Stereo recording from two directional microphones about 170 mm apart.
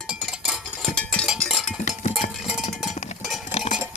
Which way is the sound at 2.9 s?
40° left (ahead or behind).